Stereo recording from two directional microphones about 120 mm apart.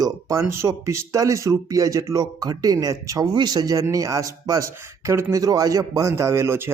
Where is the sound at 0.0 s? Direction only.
25° right (ahead or behind).